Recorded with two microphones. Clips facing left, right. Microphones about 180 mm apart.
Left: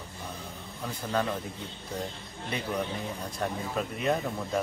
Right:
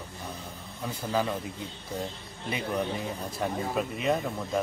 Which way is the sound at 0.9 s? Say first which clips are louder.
Right 1 dB; 5° right (ahead or behind).